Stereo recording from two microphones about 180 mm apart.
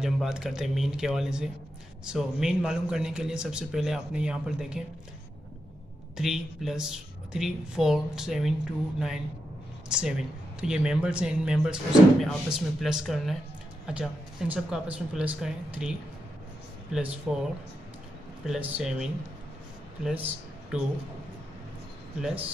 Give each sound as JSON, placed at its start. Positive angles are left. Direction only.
{"t": 0.0, "sound": "a man's voice", "side_deg": -5}
{"t": 6.1, "sound": "a man's voice", "side_deg": 0}
{"t": 9.8, "sound": "a man's voice", "side_deg": -5}
{"t": 16.9, "sound": "a man's voice", "side_deg": -5}
{"t": 20.1, "sound": "a man's voice", "side_deg": -5}